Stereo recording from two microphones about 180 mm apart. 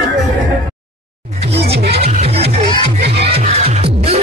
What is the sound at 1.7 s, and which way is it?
Music, 65° right (ahead or behind).